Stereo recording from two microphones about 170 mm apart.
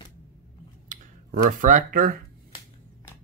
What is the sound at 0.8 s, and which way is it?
Speech, 50° right (ahead or behind).